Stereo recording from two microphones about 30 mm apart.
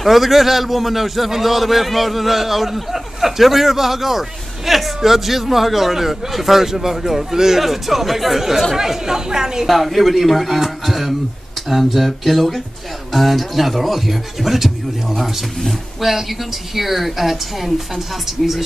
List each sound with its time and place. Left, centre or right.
0.0 s a man's voice: centre
7.6 s a man's voice: centre
9.7 s a man's voice: centre